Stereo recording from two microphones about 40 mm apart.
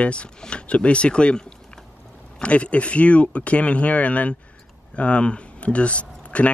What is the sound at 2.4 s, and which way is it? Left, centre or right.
Speech, left.